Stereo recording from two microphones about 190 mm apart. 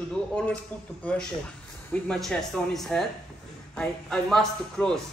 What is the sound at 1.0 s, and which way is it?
A man's voice, 5° left (ahead or behind).